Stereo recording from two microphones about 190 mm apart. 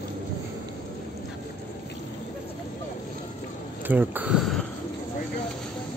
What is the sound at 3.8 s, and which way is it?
Speech, 10° right (ahead or behind).